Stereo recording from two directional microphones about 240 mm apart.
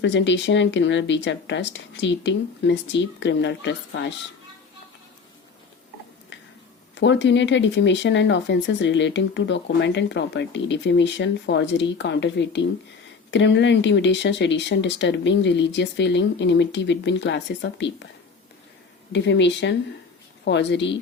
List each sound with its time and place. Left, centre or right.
0.0 s speech: left
6.9 s speech: left
19.1 s speech: left